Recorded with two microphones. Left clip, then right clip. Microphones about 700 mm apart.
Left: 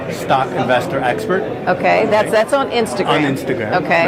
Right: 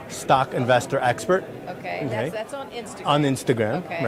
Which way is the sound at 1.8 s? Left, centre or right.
Left.